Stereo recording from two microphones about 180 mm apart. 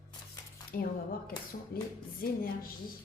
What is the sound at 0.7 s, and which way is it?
Speech, 55° left (ahead or behind).